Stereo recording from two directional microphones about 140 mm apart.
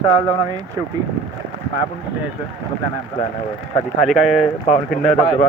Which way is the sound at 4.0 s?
Centre (ahead or behind).